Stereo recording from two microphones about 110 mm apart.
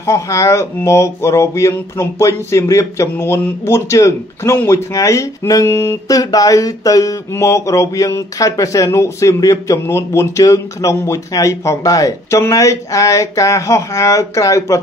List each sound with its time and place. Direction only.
0.0 s speech: 25° left (ahead or behind)